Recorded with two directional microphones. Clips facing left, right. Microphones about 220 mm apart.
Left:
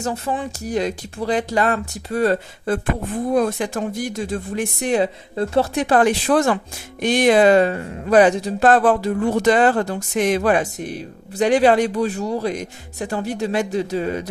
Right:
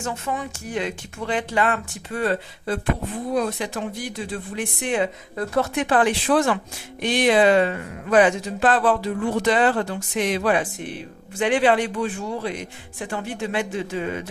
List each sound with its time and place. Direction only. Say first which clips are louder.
0.0 s speech: left 4 dB; 35° left (ahead or behind)